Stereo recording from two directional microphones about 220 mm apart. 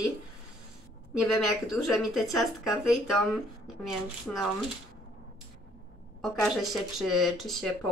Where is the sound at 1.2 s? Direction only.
Centre (ahead or behind).